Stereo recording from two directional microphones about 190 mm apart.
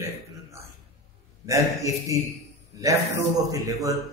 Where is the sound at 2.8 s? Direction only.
15° right (ahead or behind).